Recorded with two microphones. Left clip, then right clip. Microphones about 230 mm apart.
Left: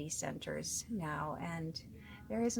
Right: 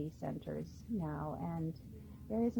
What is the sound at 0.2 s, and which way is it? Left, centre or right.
A woman's voice, left.